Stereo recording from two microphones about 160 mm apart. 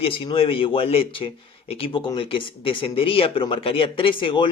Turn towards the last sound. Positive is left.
turn(degrees=30)  # may be behind; listen again after turning